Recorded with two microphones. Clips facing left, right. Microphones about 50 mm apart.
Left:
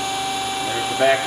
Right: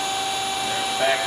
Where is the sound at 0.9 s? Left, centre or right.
Centre.